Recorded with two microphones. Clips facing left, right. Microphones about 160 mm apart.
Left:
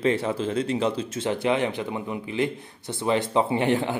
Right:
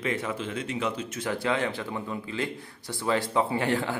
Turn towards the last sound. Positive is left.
turn(degrees=20)  # may be behind; listen again after turning